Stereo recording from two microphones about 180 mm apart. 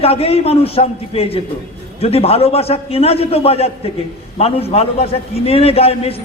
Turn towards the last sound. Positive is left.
turn(degrees=35)  # may be behind; listen again after turning